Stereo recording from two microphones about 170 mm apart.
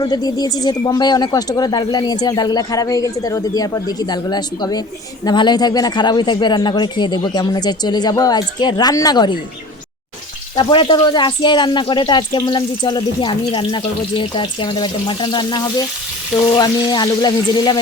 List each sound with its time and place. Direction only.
0.0 s speech: 25° left (ahead or behind)
10.5 s speech: 30° left (ahead or behind)